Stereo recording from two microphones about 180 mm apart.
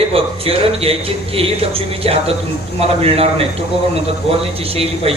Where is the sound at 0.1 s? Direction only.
35° right (ahead or behind).